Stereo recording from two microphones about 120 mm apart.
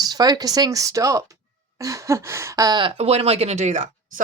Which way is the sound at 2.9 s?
55° right (ahead or behind).